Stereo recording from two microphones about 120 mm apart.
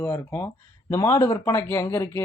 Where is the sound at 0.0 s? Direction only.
15° left (ahead or behind).